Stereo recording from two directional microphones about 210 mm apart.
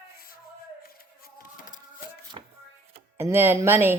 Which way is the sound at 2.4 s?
25° right (ahead or behind).